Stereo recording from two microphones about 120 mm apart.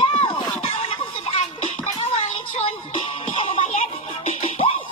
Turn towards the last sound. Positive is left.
turn(degrees=60)  # may be behind; listen again after turning